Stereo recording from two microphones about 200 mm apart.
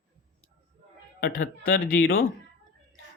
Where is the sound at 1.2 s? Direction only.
50° left (ahead or behind).